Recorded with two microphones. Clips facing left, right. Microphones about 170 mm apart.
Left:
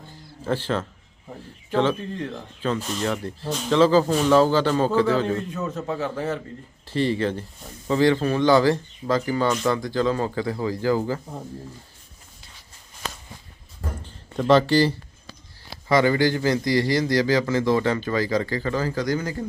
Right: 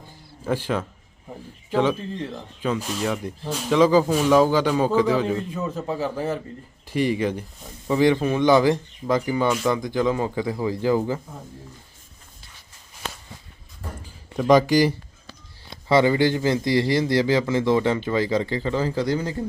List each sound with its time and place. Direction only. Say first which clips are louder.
0.4 s a man's voice: even; 10° right (ahead or behind)
14.0 s a sound: right 1 dB; 10° right (ahead or behind)
15.9 s speech: right 1 dB; 25° right (ahead or behind)